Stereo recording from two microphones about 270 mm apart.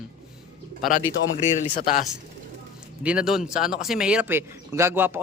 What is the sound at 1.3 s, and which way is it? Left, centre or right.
Speech, left.